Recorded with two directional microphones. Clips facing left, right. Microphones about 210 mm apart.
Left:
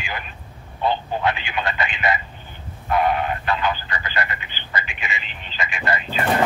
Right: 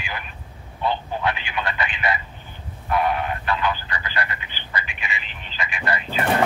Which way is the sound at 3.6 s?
20° left (ahead or behind).